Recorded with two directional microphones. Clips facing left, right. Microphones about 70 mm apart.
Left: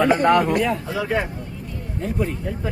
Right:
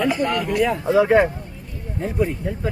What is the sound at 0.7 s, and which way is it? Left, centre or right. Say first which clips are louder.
Speech: right 8 dB; right.